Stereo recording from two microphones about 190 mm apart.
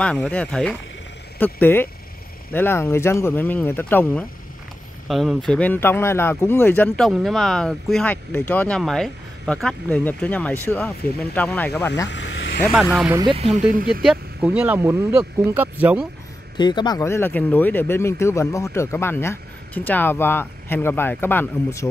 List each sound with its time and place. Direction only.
0.0 s speech: 5° left (ahead or behind)
12.1 s vehicle: 70° left (ahead or behind)
12.9 s speech: 5° right (ahead or behind)
13.2 s speech: 30° right (ahead or behind)
14.0 s speech: 5° right (ahead or behind)
16.5 s speech: 20° left (ahead or behind)